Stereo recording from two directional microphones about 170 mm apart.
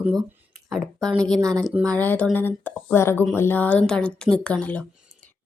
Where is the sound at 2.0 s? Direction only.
10° left (ahead or behind).